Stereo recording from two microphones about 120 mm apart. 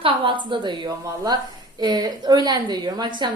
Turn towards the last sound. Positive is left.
turn(degrees=-40)  # may be behind; listen again after turning